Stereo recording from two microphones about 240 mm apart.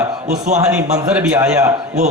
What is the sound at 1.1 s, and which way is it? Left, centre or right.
Speech, centre.